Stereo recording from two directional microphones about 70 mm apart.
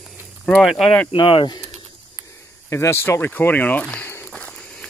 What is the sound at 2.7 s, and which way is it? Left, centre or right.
Speech, left.